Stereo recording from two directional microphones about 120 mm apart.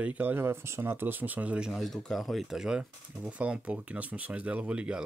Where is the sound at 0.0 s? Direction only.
15° right (ahead or behind).